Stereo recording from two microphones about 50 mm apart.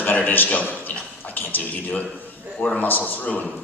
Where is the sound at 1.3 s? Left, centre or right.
Left.